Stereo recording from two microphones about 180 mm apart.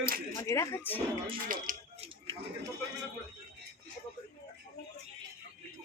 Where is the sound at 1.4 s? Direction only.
50° right (ahead or behind).